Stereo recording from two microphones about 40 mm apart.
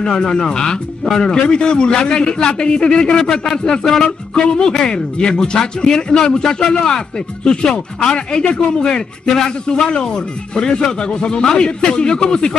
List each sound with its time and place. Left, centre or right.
0.0 s a man's voice: left